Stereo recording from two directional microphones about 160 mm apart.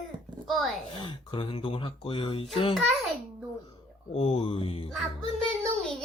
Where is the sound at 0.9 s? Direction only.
35° left (ahead or behind).